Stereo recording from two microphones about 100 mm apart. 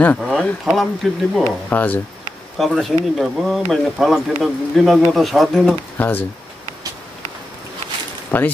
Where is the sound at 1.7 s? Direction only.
15° left (ahead or behind).